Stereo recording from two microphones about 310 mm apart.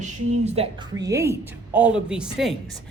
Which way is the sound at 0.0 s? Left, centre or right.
Centre.